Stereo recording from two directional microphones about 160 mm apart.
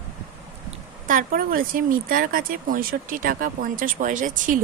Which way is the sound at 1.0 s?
60° right (ahead or behind).